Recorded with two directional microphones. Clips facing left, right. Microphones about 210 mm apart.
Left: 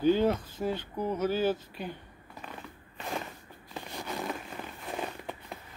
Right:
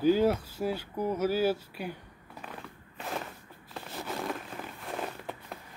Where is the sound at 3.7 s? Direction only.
5° right (ahead or behind).